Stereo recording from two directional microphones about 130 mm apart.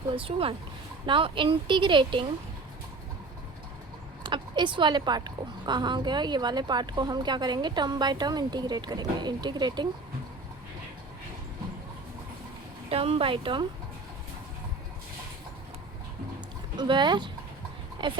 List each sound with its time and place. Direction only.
0.2 s a woman's voice: 45° right (ahead or behind)
4.2 s a woman's voice: 35° right (ahead or behind)
12.9 s a woman's voice: 50° right (ahead or behind)
16.7 s a woman's voice: 35° right (ahead or behind)